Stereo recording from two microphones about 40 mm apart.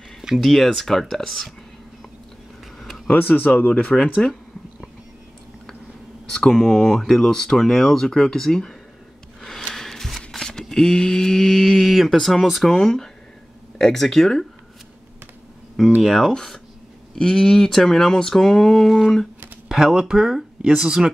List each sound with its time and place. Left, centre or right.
0.4 s speech: centre
3.1 s speech: left
6.3 s speech: centre
9.8 s a sound: centre
10.6 s speech: centre
11.7 s speech: centre
12.6 s speech: centre
16.0 s speech: centre
18.9 s speech: centre